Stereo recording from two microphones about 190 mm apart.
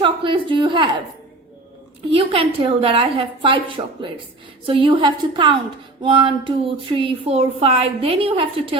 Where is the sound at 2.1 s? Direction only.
30° right (ahead or behind).